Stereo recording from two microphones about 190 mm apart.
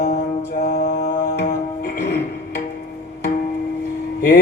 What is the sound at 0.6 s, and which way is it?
Mantra, 55° left (ahead or behind).